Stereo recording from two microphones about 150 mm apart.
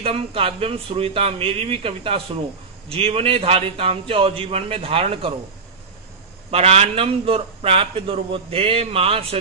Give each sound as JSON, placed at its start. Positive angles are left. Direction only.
{"t": 0.0, "sound": "a man's voice", "side_deg": -40}
{"t": 6.5, "sound": "a man's voice", "side_deg": -40}